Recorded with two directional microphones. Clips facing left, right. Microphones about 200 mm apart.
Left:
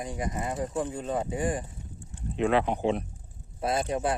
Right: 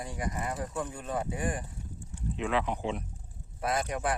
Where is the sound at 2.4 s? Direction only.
55° left (ahead or behind).